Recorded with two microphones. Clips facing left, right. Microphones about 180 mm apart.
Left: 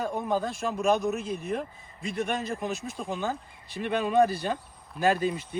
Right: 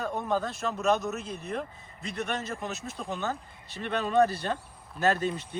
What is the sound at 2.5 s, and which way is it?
Speech, 10° left (ahead or behind).